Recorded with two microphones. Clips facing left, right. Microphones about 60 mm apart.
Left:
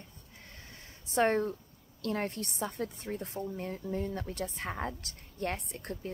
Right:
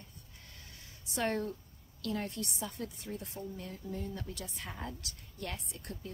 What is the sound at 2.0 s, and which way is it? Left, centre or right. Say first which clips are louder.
A woman's voice: left 3 dB; left.